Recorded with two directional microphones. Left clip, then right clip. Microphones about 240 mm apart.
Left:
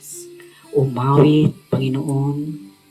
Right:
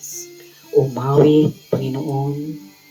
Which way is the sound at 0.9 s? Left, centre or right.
Left.